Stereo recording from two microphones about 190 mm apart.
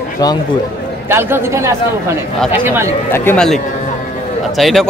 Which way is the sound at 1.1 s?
10° right (ahead or behind).